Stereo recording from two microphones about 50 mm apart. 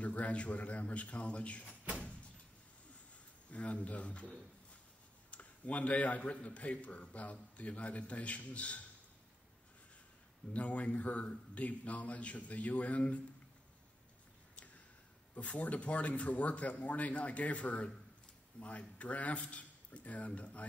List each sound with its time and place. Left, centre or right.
0.0 s a man's voice: left
3.4 s a man's voice: left
10.5 s a man's voice: left
15.3 s a man's voice: left